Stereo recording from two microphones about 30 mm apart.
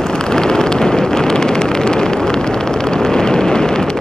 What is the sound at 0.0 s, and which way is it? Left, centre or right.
Vehicle, left.